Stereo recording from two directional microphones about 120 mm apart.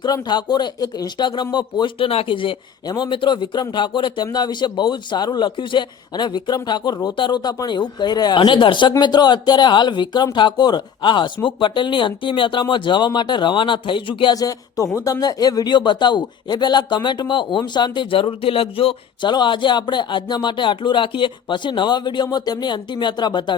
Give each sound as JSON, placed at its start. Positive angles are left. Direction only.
{"t": 0.0, "sound": "speech", "side_deg": 35}
{"t": 14.3, "sound": "speech", "side_deg": 30}
{"t": 19.3, "sound": "speech", "side_deg": 40}